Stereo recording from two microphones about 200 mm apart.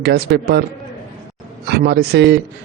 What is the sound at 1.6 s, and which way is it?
Speech, 55° right (ahead or behind).